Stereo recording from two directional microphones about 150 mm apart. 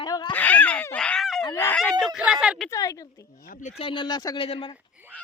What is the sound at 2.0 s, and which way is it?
Speech, 5° right (ahead or behind).